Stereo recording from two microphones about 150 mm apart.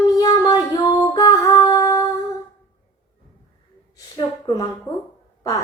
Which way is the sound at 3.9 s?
25° left (ahead or behind).